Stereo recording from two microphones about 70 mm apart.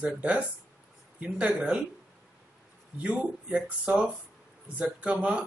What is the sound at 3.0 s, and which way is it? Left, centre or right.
Speech, centre.